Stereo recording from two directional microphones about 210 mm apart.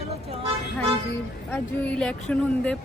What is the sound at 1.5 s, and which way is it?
Speech, 5° left (ahead or behind).